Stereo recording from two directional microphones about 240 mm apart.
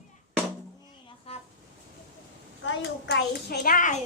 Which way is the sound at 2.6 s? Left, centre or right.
Left.